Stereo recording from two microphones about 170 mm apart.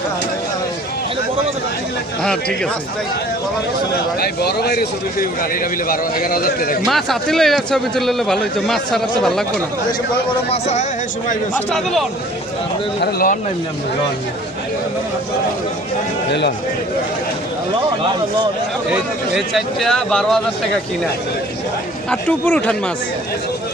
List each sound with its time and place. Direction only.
4.2 s a man's voice: 70° left (ahead or behind)
6.9 s a man's voice: centre (ahead or behind)
10.5 s speech: 40° left (ahead or behind)
11.5 s a man's voice: centre (ahead or behind)
13.0 s a man's voice: 60° left (ahead or behind)
16.3 s a man's voice: 90° left
18.9 s a man's voice: centre (ahead or behind)
22.1 s a man's voice: 10° left (ahead or behind)